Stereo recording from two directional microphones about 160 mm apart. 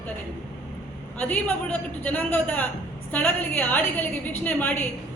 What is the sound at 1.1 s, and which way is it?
A woman's voice, 10° left (ahead or behind).